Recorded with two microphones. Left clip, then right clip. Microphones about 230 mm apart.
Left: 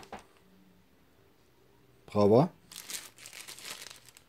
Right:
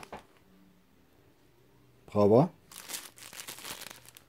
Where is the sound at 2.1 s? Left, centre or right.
Centre.